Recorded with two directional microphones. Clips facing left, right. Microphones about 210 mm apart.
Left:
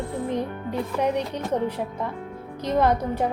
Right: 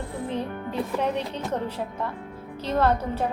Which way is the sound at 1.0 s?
15° left (ahead or behind).